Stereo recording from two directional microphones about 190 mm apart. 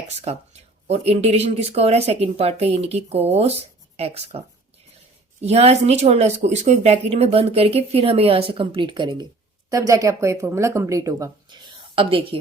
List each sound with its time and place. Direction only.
0.2 s speech: 35° right (ahead or behind)